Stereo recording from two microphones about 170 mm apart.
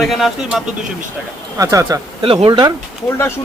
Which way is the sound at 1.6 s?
15° right (ahead or behind).